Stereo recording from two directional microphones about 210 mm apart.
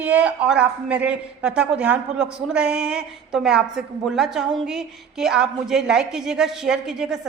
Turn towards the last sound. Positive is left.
turn(degrees=0)  # may be behind; listen again after turning